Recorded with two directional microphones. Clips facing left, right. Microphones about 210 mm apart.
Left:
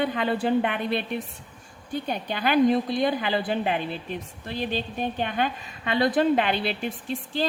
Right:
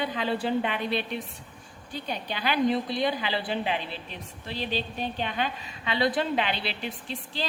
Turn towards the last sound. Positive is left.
turn(degrees=50)  # may be behind; listen again after turning